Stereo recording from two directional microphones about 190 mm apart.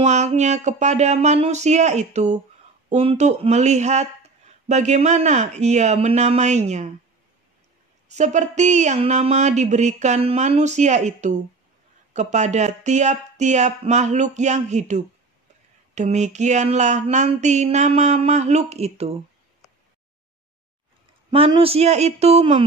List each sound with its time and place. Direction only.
0.0 s speech: 35° right (ahead or behind)
8.1 s speech: 40° right (ahead or behind)
21.3 s speech: 30° right (ahead or behind)